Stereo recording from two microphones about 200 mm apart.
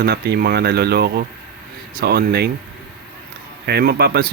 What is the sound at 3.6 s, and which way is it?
Speech, 55° right (ahead or behind).